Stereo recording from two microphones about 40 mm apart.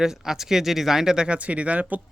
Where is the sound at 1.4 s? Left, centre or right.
Right.